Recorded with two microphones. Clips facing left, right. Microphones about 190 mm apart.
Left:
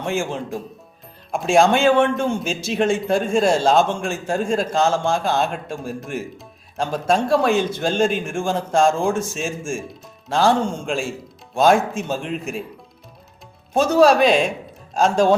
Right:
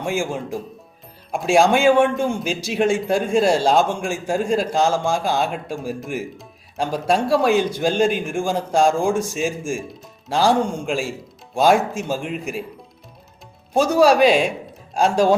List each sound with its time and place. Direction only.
0.0 s a man's voice: 10° right (ahead or behind)
3.5 s a man's voice: 10° right (ahead or behind)
10.7 s a man's voice: 5° right (ahead or behind)
13.7 s a man's voice: 10° right (ahead or behind)